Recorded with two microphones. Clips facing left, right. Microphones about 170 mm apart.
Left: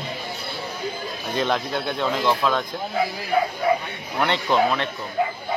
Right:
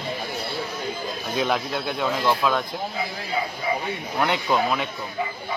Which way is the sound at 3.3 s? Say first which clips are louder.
Left 6 dB; 60° left (ahead or behind).